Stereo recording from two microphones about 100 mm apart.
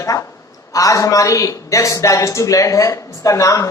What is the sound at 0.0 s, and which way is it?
A woman's voice, 30° left (ahead or behind).